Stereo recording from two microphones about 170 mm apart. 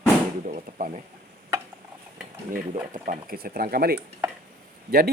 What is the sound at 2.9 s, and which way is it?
Speech, 50° right (ahead or behind).